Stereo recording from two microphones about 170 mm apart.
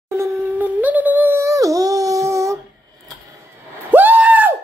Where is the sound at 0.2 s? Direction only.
15° right (ahead or behind).